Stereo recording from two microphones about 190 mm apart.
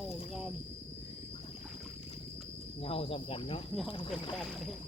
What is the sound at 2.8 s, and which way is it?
Cricket, 30° left (ahead or behind).